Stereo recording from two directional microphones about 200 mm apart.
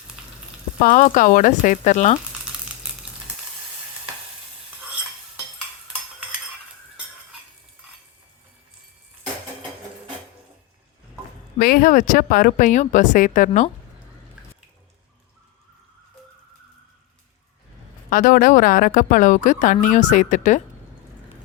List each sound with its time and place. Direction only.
0.8 s speech: 40° left (ahead or behind)
2.5 s sizzle: 5° right (ahead or behind)
11.6 s speech: 45° left (ahead or behind)
18.1 s speech: 45° left (ahead or behind)